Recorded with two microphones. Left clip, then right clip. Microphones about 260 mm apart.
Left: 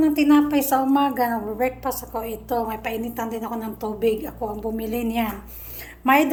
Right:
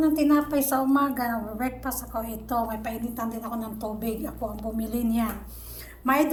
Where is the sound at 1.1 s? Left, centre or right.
Left.